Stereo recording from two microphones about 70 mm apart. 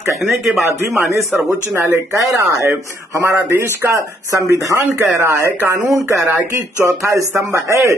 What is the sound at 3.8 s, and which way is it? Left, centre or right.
A man's voice, right.